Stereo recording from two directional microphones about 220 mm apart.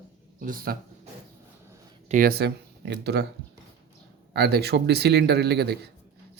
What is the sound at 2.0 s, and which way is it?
Speech, 40° right (ahead or behind).